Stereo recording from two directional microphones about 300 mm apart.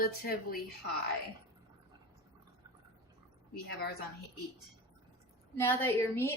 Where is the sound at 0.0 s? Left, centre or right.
Left.